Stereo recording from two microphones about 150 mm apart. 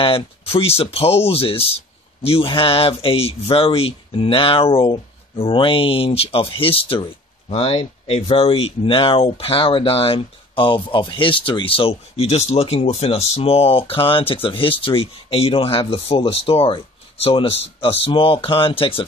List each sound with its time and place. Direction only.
0.0 s speech: 40° left (ahead or behind)